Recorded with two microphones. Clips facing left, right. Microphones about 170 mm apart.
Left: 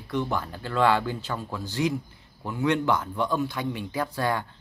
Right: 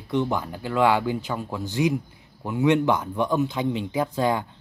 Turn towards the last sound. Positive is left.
turn(degrees=-15)  # may be behind; listen again after turning